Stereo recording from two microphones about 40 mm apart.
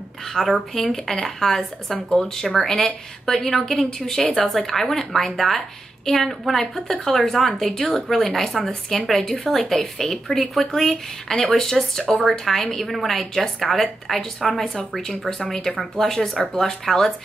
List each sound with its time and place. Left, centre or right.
0.3 s speech: centre
2.1 s a woman's voice: centre
9.2 s speech: centre
9.5 s a woman's voice: centre
14.8 s speech: centre